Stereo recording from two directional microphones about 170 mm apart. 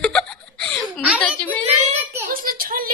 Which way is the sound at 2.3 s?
55° right (ahead or behind).